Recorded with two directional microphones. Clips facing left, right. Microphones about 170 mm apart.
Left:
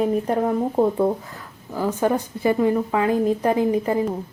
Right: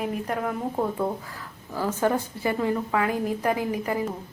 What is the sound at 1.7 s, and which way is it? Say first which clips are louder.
A woman's voice: left 3 dB; 15° left (ahead or behind).